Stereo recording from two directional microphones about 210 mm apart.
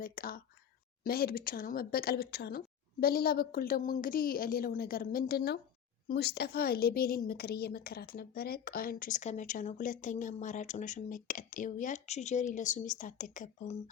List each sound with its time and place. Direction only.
0.0 s a woman's voice: 45° left (ahead or behind)